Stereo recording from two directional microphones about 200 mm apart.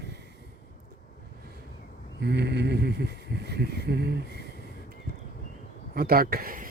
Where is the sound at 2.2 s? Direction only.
55° right (ahead or behind).